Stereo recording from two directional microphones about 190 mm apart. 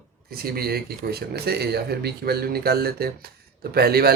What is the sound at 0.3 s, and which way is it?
Speech, 55° right (ahead or behind).